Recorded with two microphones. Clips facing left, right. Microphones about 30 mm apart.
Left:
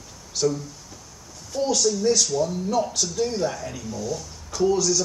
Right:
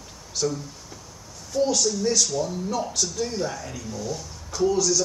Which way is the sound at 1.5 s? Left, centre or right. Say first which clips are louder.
Even; centre.